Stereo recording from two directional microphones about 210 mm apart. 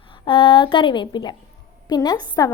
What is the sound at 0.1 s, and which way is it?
A woman's voice, 25° left (ahead or behind).